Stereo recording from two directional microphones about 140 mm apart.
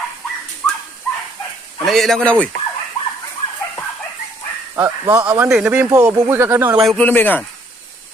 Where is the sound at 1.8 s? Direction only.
Centre (ahead or behind).